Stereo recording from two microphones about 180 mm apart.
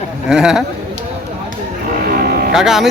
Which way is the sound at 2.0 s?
55° right (ahead or behind).